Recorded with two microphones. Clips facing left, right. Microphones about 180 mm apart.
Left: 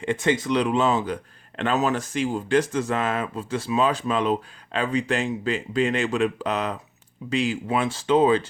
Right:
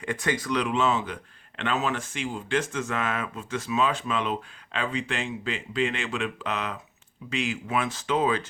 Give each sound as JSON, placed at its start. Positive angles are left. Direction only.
{"t": 0.0, "sound": "speech", "side_deg": 25}